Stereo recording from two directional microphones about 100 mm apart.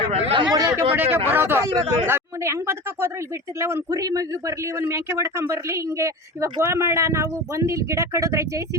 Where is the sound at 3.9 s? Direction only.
35° right (ahead or behind).